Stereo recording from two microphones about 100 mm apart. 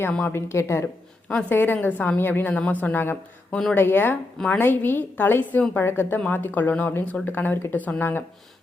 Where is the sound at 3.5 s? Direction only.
10° left (ahead or behind).